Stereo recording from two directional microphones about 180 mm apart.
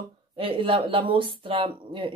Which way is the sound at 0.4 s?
30° right (ahead or behind).